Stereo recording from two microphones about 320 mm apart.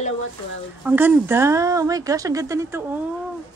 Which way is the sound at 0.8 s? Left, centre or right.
Centre.